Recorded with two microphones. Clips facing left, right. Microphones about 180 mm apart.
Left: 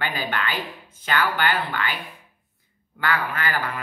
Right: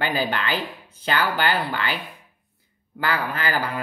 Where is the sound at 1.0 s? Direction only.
35° right (ahead or behind).